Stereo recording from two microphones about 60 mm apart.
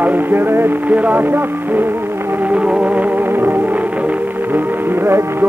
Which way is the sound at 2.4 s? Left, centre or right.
Right.